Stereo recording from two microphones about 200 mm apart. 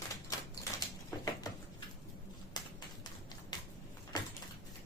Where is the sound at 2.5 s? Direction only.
20° left (ahead or behind).